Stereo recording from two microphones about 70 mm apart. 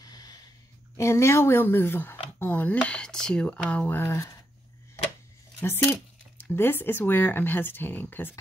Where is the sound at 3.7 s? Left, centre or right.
Left.